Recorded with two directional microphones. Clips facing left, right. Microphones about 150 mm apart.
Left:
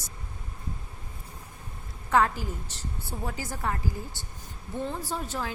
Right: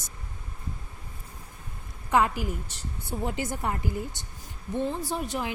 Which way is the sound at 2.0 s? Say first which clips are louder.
Even; 15° right (ahead or behind).